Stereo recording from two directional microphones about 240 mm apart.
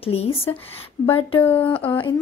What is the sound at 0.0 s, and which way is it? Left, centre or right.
A woman's voice, left.